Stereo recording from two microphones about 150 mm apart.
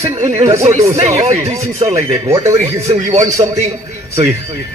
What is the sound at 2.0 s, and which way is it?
Speech, 20° right (ahead or behind).